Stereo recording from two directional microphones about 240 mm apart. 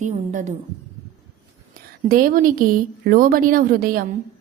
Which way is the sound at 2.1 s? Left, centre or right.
Right.